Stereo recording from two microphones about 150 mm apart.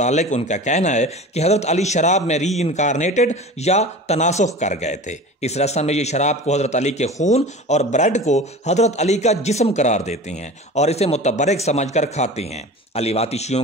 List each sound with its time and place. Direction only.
0.0 s speech: 50° left (ahead or behind)